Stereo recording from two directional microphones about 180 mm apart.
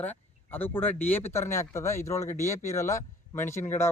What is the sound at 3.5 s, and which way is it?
Speech, 40° left (ahead or behind).